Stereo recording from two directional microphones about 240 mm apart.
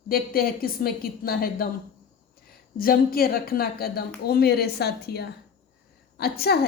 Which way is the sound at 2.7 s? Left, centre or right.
Left.